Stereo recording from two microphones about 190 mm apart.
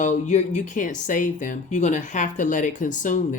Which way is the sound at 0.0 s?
40° left (ahead or behind).